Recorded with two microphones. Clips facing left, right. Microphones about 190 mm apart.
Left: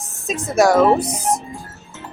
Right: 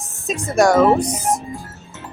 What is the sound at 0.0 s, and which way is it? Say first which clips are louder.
Speech: even; centre (ahead or behind).